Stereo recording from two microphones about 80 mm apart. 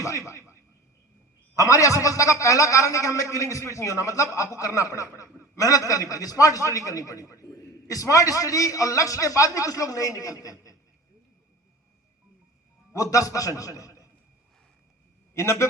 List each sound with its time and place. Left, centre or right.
0.0 s speech: left
1.5 s a man's voice: left
12.9 s a man's voice: left
15.4 s speech: left